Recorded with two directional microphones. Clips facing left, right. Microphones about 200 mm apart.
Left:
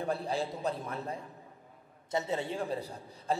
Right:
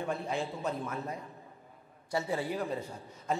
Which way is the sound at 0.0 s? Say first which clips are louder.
Left 1 dB; 35° left (ahead or behind).